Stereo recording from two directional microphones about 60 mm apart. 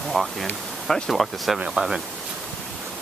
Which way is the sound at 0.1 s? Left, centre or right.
Centre.